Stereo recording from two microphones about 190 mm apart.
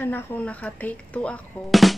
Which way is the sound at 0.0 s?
10° left (ahead or behind).